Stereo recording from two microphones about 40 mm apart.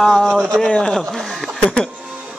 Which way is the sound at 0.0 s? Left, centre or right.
Centre.